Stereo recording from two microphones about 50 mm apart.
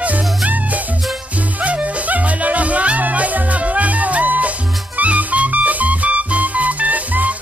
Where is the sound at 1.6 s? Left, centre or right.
Right.